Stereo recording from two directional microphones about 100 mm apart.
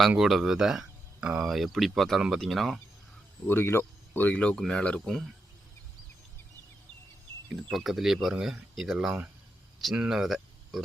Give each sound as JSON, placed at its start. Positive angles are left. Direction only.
{"t": 0.2, "sound": "speech", "side_deg": -5}
{"t": 3.4, "sound": "speech", "side_deg": 25}
{"t": 7.5, "sound": "speech", "side_deg": 0}